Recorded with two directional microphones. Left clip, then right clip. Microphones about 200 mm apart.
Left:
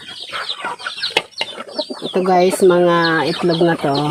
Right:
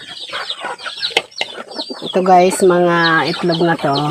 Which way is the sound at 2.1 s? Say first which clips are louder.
Right 4 dB; 15° right (ahead or behind).